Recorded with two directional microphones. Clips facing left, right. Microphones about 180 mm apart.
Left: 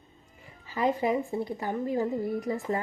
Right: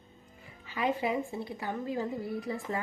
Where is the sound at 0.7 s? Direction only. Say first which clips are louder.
Left 4 dB; 40° left (ahead or behind).